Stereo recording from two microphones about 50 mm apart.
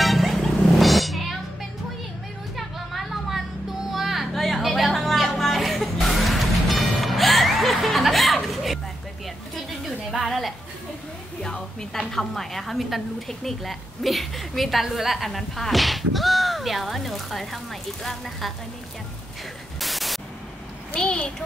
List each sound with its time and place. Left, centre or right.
0.0 s vehicle: centre
0.4 s wild animals: centre
2.5 s a sound: centre
3.9 s music: centre
10.2 s a sound: centre
11.4 s music: centre
12.0 s a woman's voice: centre
19.8 s static: centre
21.0 s a child's voice: centre